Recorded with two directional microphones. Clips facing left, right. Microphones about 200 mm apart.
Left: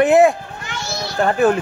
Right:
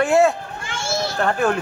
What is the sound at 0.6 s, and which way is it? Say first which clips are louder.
Children playing: right 3 dB; 25° right (ahead or behind).